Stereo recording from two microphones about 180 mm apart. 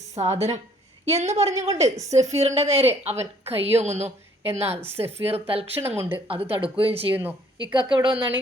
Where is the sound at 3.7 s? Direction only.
15° right (ahead or behind).